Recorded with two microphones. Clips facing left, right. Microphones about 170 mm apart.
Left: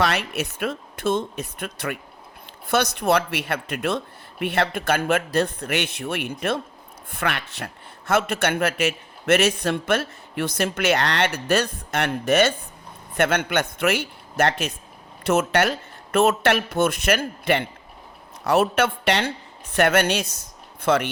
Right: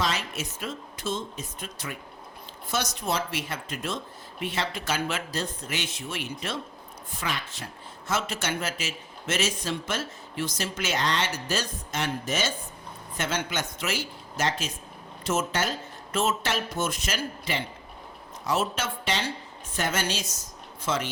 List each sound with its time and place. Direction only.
0.0 s speech: 65° left (ahead or behind)